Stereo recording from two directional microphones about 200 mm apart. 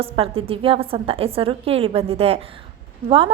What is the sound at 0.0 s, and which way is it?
A woman's voice, 30° right (ahead or behind).